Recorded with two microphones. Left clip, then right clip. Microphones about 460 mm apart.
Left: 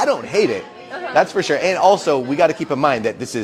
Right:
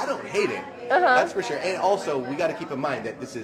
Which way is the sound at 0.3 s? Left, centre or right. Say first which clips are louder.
Left 8 dB; left.